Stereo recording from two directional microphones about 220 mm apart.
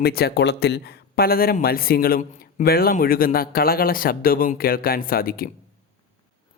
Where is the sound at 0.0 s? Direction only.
45° left (ahead or behind).